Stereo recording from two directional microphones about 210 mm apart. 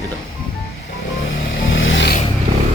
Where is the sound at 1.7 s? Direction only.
65° left (ahead or behind).